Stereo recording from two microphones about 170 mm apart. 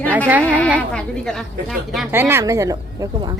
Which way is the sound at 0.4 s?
10° left (ahead or behind).